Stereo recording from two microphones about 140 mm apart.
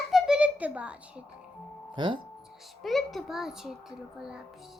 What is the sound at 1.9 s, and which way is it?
Speech, 35° right (ahead or behind).